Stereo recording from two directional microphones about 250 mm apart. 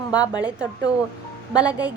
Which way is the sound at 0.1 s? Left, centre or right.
Centre.